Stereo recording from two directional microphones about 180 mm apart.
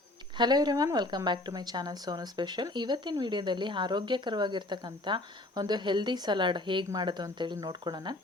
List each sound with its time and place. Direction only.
0.3 s a woman's voice: 25° right (ahead or behind)